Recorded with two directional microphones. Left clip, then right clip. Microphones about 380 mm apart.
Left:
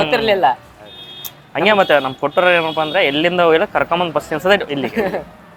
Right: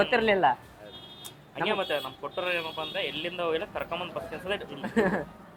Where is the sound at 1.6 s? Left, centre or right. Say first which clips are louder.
Left 16 dB; left.